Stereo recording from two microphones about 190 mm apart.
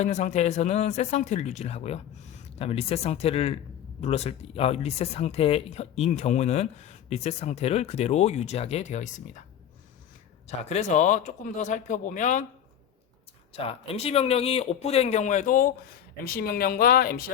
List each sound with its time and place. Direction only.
0.0 s speech: 40° left (ahead or behind)
10.4 s speech: 35° left (ahead or behind)
13.5 s speech: 30° left (ahead or behind); by 17.3 s 50° left (ahead or behind)